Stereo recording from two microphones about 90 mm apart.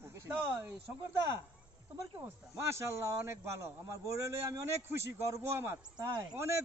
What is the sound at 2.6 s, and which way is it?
A man's voice, 30° right (ahead or behind).